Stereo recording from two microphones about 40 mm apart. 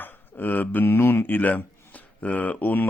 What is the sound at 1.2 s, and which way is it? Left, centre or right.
Speech, left.